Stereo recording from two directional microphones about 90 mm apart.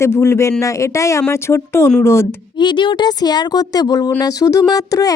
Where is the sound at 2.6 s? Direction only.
60° left (ahead or behind).